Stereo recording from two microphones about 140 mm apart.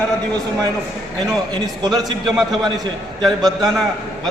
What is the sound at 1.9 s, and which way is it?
A man's voice, centre (ahead or behind).